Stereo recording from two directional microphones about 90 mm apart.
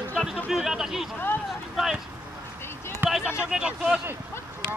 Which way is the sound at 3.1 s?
10° right (ahead or behind).